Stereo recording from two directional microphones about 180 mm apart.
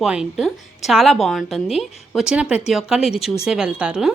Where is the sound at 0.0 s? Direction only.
5° right (ahead or behind).